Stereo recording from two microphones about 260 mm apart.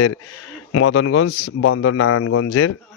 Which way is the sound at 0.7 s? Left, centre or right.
Left.